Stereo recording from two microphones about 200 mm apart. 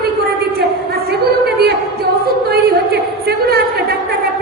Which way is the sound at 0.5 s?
50° right (ahead or behind).